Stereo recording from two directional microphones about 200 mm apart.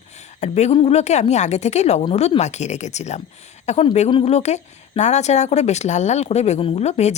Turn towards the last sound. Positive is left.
turn(degrees=35)  # may be behind; listen again after turning